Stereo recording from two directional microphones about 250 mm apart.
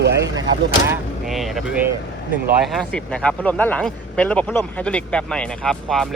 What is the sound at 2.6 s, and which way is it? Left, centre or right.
Speech, centre.